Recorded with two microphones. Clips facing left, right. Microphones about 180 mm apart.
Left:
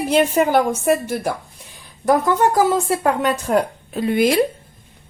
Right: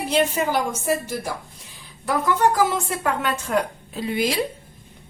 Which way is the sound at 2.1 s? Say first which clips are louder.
Left 4 dB; 45° left (ahead or behind).